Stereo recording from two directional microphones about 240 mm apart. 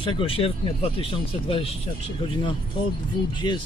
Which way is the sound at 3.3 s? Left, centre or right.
Centre.